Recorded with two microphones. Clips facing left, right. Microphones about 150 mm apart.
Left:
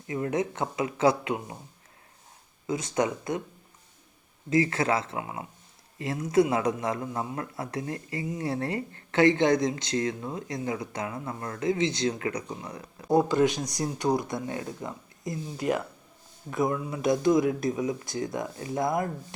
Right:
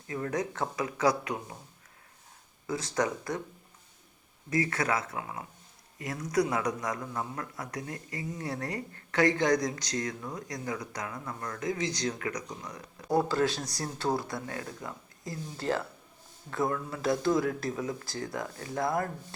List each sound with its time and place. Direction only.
0.1 s speech: 20° left (ahead or behind)
2.6 s speech: 20° left (ahead or behind)
4.4 s speech: 25° left (ahead or behind)